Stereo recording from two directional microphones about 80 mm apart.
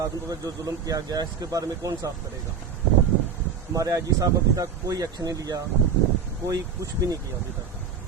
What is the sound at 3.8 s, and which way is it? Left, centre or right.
Speech, right.